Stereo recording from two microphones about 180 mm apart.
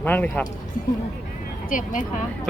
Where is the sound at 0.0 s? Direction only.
10° left (ahead or behind).